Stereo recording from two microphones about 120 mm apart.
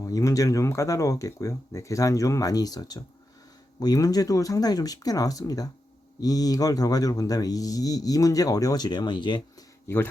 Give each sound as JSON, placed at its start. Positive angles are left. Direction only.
{"t": 0.0, "sound": "speech", "side_deg": 25}